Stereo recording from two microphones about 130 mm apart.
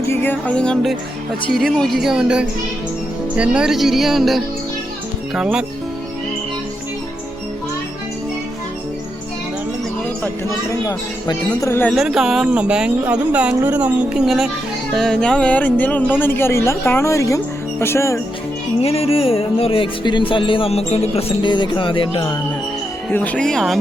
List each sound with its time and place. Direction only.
0.1 s speech: 15° left (ahead or behind); by 5.6 s 5° right (ahead or behind)
10.2 s speech: 25° left (ahead or behind)
11.9 s speech: 5° right (ahead or behind); by 18.2 s 20° left (ahead or behind)
18.8 s speech: 50° left (ahead or behind)
23.1 s speech: 10° left (ahead or behind)